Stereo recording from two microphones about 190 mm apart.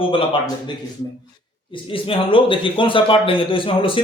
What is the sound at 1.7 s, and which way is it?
Speech, 25° left (ahead or behind).